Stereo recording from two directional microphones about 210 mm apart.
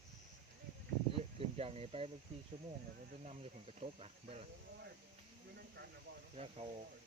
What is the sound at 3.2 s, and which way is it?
Speech, 30° right (ahead or behind).